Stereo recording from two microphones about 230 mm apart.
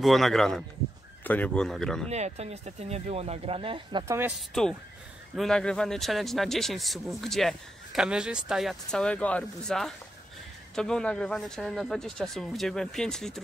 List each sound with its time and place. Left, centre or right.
0.0 s speech: centre
2.0 s speech: right
4.5 s speech: centre